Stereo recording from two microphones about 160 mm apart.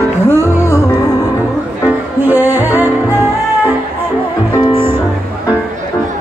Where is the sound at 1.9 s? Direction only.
10° right (ahead or behind).